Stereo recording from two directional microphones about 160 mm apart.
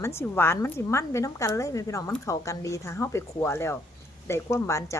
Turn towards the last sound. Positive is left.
turn(degrees=20)  # may be behind; listen again after turning